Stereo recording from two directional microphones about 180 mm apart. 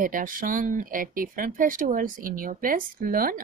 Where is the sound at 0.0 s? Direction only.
50° right (ahead or behind).